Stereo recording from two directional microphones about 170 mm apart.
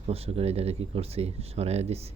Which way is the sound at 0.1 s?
35° right (ahead or behind).